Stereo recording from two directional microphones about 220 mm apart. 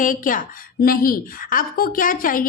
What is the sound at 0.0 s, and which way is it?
A woman's voice, 35° left (ahead or behind).